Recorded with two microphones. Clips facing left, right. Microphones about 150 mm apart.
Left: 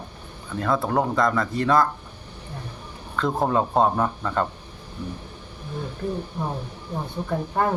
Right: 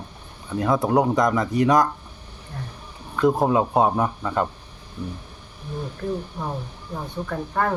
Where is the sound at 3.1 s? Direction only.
10° right (ahead or behind).